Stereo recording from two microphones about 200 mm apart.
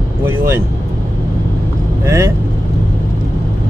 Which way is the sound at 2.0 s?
15° right (ahead or behind).